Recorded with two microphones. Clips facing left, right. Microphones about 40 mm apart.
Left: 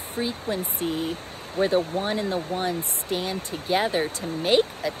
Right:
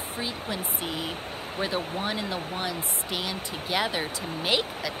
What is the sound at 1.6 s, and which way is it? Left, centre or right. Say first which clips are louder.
A woman's voice: left 7 dB; right.